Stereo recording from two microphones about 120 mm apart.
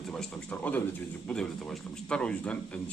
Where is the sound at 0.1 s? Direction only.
10° left (ahead or behind).